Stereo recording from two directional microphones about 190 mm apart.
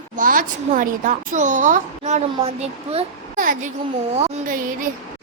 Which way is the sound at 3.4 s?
45° right (ahead or behind).